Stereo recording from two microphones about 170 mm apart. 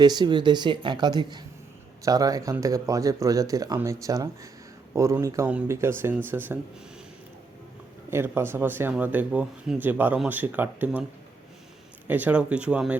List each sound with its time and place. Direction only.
0.0 s speech: 25° right (ahead or behind)
8.1 s speech: 15° right (ahead or behind)
12.0 s speech: 10° right (ahead or behind)